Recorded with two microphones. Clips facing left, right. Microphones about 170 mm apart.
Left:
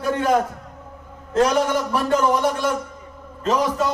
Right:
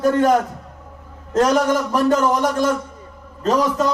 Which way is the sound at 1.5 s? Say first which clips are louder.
Right 3 dB; 45° right (ahead or behind).